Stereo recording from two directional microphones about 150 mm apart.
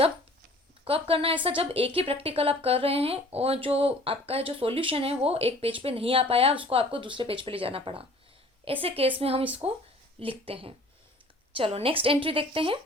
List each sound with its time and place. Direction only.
0.9 s speech: 40° right (ahead or behind)